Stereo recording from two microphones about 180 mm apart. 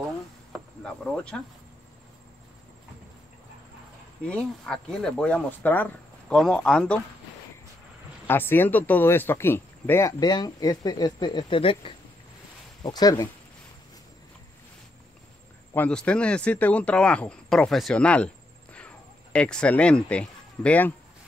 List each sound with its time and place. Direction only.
0.5 s cricket: 5° left (ahead or behind)
4.2 s speech: 5° left (ahead or behind)
8.3 s speech: 10° left (ahead or behind)
15.7 s speech: 5° left (ahead or behind)